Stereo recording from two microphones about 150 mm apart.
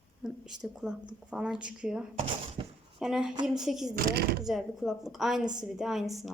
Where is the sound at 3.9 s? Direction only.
90° right.